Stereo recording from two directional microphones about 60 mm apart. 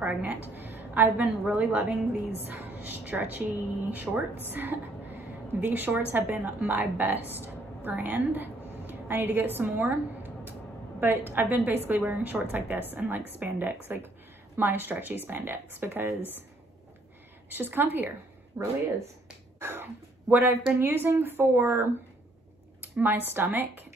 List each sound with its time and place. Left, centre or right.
0.0 s a woman's voice: right
17.5 s a woman's voice: right
18.6 s speech: right
19.6 s finger snapping: right
20.2 s a woman's voice: right
22.8 s a sound: right
23.3 s a woman's voice: right